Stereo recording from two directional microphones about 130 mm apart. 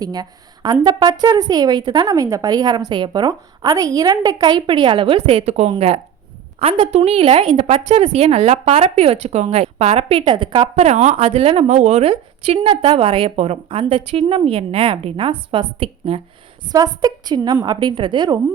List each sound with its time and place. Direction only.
0.0 s a woman's voice: 30° right (ahead or behind)
16.7 s a woman's voice: 30° right (ahead or behind)